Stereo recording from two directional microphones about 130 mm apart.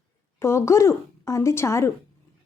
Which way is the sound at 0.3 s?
20° left (ahead or behind).